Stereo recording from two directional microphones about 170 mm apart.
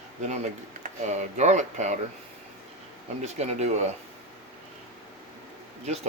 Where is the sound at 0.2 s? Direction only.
45° right (ahead or behind).